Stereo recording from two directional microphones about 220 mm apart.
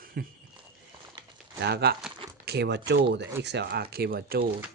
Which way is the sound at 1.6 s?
45° right (ahead or behind).